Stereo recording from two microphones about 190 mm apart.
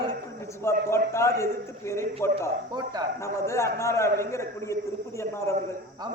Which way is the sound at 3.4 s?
15° left (ahead or behind).